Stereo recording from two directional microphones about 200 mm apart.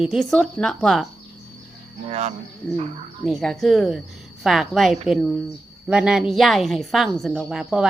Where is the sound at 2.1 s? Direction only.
35° right (ahead or behind).